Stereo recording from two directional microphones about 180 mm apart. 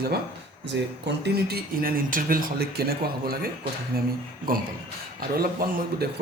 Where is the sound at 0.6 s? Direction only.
70° right (ahead or behind).